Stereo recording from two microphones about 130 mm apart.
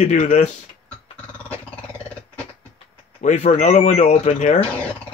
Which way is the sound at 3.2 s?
60° left (ahead or behind).